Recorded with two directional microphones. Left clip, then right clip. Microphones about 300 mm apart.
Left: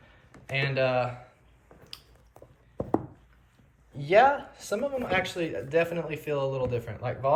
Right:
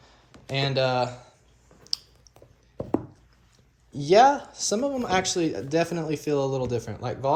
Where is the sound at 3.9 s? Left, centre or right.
Centre.